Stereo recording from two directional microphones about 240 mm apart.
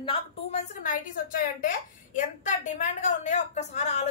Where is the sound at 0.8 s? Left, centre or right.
Left.